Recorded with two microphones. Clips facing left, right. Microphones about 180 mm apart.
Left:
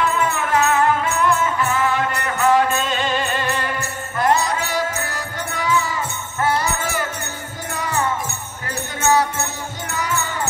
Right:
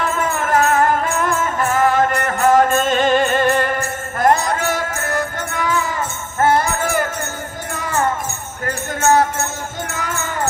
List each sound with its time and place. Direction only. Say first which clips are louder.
0.0 s music: even; 50° right (ahead or behind)